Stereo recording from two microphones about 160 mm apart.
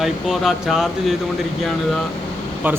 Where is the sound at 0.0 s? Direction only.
Centre (ahead or behind).